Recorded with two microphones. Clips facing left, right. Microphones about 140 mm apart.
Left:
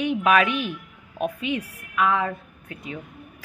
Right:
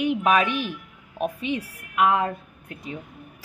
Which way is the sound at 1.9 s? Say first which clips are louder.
Right 2 dB; 20° right (ahead or behind).